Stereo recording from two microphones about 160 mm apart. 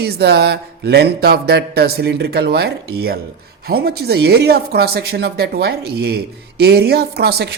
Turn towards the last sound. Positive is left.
turn(degrees=-85)